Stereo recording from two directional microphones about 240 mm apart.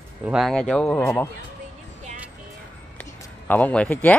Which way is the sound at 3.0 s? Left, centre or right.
Centre.